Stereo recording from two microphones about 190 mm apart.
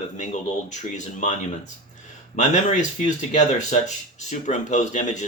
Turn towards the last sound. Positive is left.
turn(degrees=40)  # may be behind; listen again after turning